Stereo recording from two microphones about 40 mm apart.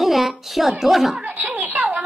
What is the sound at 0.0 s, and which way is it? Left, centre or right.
A woman's voice, centre.